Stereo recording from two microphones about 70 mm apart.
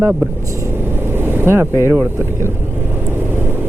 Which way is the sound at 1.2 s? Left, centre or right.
Right.